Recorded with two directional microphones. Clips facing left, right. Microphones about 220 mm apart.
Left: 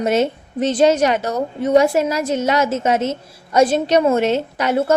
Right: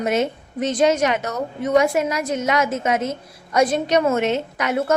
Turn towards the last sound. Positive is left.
turn(degrees=30)  # may be behind; listen again after turning